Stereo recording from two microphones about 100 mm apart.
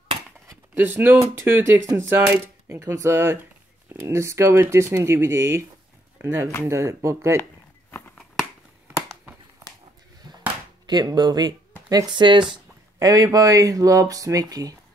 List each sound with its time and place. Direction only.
0.7 s speech: 20° right (ahead or behind)
1.2 s speech: 30° right (ahead or behind)
10.9 s speech: 45° right (ahead or behind)
13.0 s speech: 40° right (ahead or behind)